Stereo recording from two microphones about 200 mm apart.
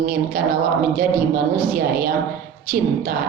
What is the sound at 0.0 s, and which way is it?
Child singing, 50° right (ahead or behind).